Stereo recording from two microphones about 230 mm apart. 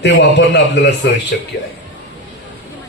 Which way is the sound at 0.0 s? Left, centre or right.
Left.